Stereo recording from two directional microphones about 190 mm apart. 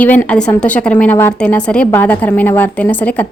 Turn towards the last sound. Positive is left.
turn(degrees=10)  # may be behind; listen again after turning